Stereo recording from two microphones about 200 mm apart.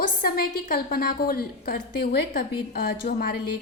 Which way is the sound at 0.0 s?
45° left (ahead or behind).